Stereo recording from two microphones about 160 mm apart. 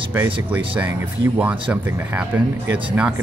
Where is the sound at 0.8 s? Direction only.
20° right (ahead or behind).